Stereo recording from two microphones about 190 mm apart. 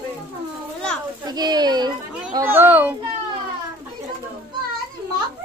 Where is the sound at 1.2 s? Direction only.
20° right (ahead or behind).